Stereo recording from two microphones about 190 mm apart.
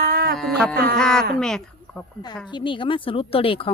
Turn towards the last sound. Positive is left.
turn(degrees=30)  # may be behind; listen again after turning